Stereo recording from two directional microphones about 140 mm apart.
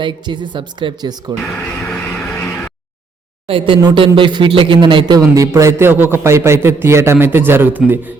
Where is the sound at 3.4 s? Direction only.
40° right (ahead or behind).